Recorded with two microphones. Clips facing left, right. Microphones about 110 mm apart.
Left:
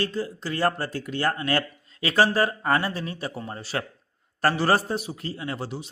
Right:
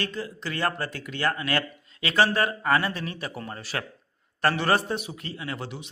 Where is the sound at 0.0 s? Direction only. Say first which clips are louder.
Left 4 dB; 35° left (ahead or behind).